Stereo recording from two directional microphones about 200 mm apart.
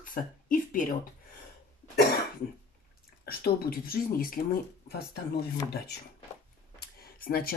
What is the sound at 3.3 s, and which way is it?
Speech, 50° left (ahead or behind).